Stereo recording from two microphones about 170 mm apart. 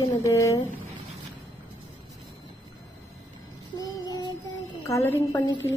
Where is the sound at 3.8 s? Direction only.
25° left (ahead or behind).